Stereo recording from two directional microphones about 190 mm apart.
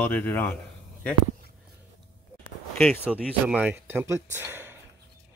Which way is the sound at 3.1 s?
5° right (ahead or behind).